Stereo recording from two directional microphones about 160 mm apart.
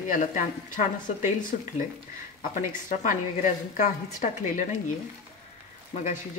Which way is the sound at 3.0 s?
55° left (ahead or behind).